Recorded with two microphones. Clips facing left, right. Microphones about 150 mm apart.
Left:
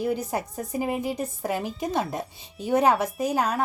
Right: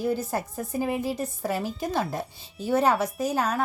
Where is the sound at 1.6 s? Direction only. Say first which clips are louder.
Even; centre (ahead or behind).